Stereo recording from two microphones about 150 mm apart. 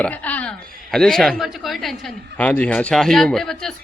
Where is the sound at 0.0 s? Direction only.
10° left (ahead or behind).